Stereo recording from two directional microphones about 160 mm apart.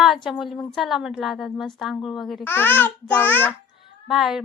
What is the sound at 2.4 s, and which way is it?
A child's voice, 10° left (ahead or behind).